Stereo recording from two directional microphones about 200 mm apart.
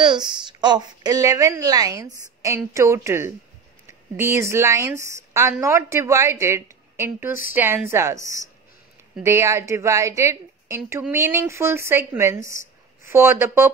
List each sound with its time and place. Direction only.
0.5 s a woman's voice: 20° right (ahead or behind)